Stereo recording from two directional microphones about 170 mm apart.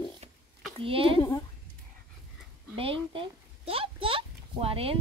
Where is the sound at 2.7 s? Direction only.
30° right (ahead or behind).